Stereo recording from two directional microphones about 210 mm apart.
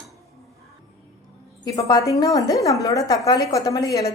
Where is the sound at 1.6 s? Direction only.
15° left (ahead or behind).